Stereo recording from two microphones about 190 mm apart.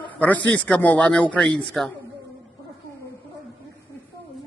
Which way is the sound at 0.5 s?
5° left (ahead or behind).